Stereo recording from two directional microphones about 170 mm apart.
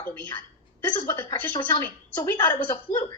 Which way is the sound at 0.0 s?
10° left (ahead or behind).